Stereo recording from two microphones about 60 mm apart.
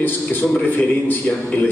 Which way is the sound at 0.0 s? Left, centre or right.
Left.